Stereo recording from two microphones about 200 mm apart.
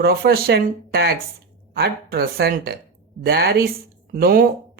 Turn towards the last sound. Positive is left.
turn(degrees=-45)  # may be behind; listen again after turning